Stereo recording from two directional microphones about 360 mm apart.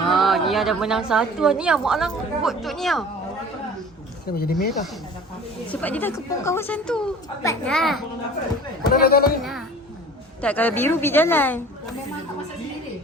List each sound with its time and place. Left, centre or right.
0.1 s a woman's voice: centre
4.4 s speech: left
5.8 s a woman's voice: centre
8.9 s speech: left
9.4 s a woman's voice: centre